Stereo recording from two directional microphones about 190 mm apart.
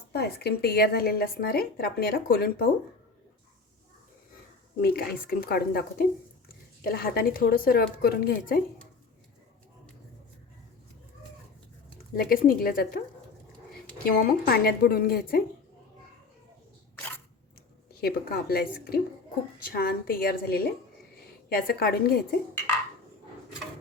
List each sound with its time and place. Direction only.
0.1 s speech: 60° left (ahead or behind)
4.8 s speech: 55° left (ahead or behind)
12.1 s speech: 50° left (ahead or behind)
14.0 s speech: 50° left (ahead or behind)
18.0 s a woman's voice: 55° left (ahead or behind)